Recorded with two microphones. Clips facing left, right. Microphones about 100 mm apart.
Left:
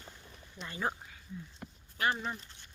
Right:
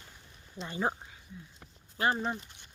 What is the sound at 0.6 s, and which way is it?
Speech, 25° right (ahead or behind).